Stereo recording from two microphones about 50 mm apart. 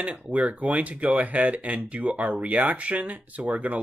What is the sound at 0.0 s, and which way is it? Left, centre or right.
Speech, right.